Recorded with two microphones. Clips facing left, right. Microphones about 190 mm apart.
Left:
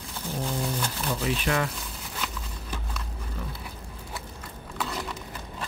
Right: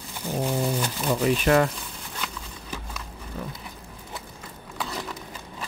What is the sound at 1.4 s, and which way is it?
Speech, 50° right (ahead or behind).